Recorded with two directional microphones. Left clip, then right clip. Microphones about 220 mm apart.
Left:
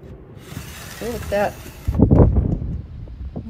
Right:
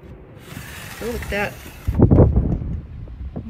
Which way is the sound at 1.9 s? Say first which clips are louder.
Right 1 dB; 25° left (ahead or behind).